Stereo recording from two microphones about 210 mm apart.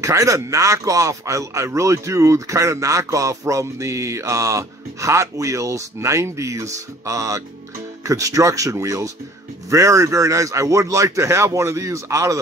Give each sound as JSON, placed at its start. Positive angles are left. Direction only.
{"t": 0.0, "sound": "speech", "side_deg": -15}